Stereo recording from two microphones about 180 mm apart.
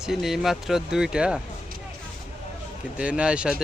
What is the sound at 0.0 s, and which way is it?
Speech, centre (ahead or behind).